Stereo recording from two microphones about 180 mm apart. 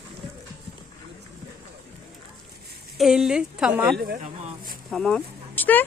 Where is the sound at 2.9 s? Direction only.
Centre (ahead or behind).